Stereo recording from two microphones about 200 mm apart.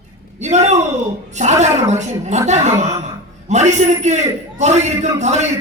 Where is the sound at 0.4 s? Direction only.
35° right (ahead or behind).